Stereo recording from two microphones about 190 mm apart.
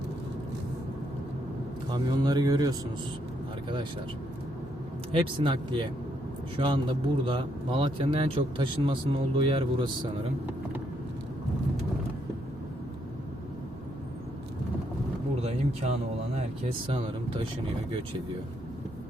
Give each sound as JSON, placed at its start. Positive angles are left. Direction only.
{"t": 1.9, "sound": "a man's voice", "side_deg": -20}
{"t": 5.1, "sound": "a man's voice", "side_deg": -25}
{"t": 15.4, "sound": "a sound", "side_deg": -35}
{"t": 16.8, "sound": "a man's voice", "side_deg": -25}